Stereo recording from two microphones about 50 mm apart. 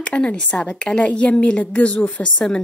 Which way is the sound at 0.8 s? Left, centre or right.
Left.